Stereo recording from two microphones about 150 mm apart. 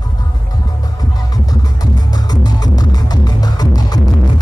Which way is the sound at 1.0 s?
25° left (ahead or behind).